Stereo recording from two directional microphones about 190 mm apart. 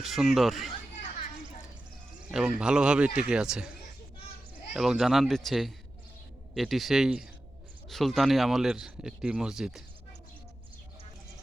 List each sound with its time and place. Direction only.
0.0 s speech: centre (ahead or behind)
2.6 s speech: 5° right (ahead or behind)
4.7 s speech: centre (ahead or behind)